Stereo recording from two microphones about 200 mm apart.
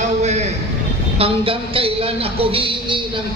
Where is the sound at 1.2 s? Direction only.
25° right (ahead or behind).